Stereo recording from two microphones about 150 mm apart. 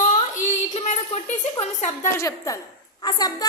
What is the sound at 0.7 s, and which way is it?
A woman's voice, 55° left (ahead or behind).